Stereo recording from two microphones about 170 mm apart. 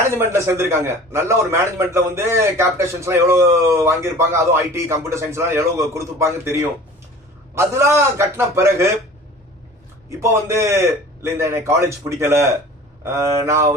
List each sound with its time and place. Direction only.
0.2 s a man's voice: 15° right (ahead or behind)
10.1 s a man's voice: 15° right (ahead or behind)